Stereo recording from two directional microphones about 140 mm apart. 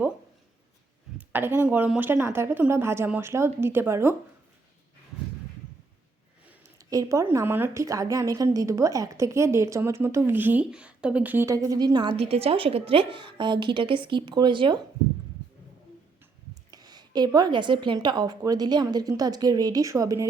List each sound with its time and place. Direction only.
1.3 s speech: 15° right (ahead or behind)
6.4 s a sound: 10° right (ahead or behind)
6.7 s a woman's voice: 25° right (ahead or behind)
12.1 s a woman's voice: 45° right (ahead or behind)
16.7 s a woman's voice: 30° right (ahead or behind)